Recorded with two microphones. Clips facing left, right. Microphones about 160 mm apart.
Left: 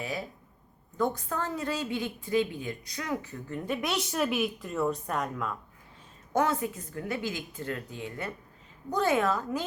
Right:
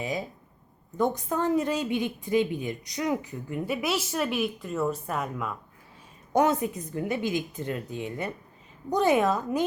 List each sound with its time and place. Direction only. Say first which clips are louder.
0.0 s a woman's voice: right 4 dB; 20° right (ahead or behind)
6.3 s a woman's voice: right 4 dB; 20° right (ahead or behind)